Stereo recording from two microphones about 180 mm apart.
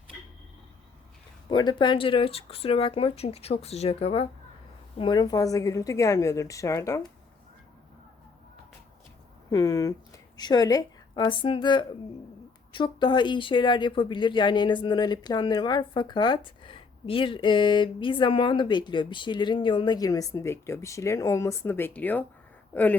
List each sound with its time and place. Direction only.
1.5 s a woman's voice: 25° left (ahead or behind)
9.5 s speech: 20° left (ahead or behind)